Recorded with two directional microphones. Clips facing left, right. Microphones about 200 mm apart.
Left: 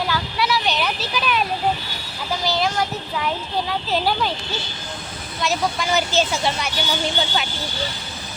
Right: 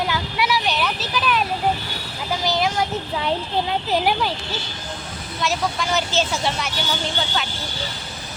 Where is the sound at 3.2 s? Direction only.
30° right (ahead or behind).